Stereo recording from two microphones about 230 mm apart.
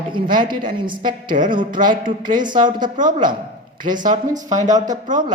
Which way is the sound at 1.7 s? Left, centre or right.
Right.